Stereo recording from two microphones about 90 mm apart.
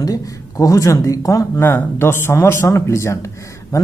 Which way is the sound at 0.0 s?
40° left (ahead or behind).